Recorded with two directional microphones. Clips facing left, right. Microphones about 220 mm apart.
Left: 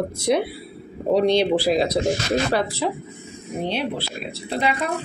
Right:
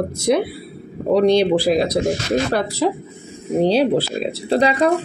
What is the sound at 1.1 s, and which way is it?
Speech, 45° right (ahead or behind).